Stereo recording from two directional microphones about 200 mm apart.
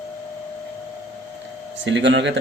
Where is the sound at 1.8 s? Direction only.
65° right (ahead or behind).